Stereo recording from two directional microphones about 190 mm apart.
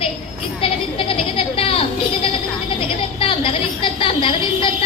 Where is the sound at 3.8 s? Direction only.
25° left (ahead or behind).